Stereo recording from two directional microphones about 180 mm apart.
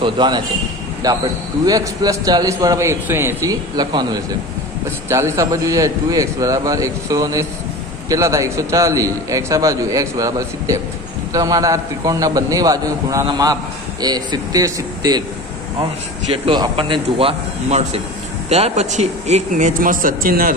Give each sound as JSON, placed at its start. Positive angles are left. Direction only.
{"t": 0.0, "sound": "a man's voice", "side_deg": -25}
{"t": 16.4, "sound": "a man's voice", "side_deg": -25}